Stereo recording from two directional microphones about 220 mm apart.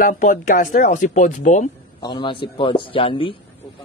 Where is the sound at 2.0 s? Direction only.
20° left (ahead or behind).